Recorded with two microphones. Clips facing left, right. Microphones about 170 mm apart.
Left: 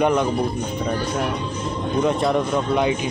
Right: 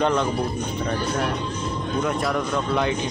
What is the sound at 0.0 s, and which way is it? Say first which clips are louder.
Speech: left 3 dB; 15° left (ahead or behind).